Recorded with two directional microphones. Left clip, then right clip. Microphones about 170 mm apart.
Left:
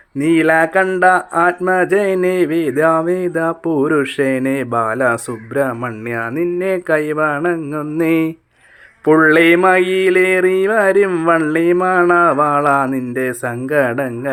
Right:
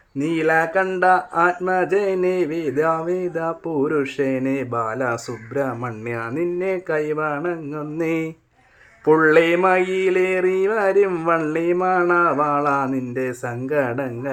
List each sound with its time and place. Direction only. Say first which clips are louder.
0.2 s speech: left 6 dB; 35° left (ahead or behind)
9.0 s mantra: left 5 dB; 30° left (ahead or behind)